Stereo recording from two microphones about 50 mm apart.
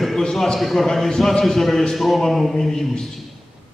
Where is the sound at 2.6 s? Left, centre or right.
Centre.